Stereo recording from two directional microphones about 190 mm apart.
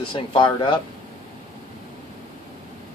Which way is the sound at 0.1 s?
25° left (ahead or behind).